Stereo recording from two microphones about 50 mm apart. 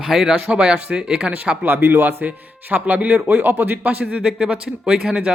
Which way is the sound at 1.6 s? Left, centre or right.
Right.